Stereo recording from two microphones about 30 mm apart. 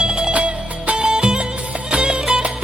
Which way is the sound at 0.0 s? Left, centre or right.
Right.